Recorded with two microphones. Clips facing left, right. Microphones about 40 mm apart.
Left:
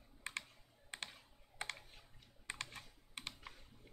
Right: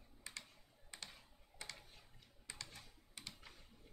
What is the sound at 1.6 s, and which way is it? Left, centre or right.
Typing, left.